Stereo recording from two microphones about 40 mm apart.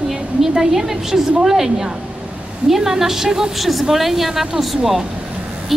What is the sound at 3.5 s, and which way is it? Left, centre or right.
A woman's voice, centre.